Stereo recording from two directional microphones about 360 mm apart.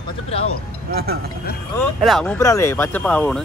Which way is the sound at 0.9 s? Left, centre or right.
Right.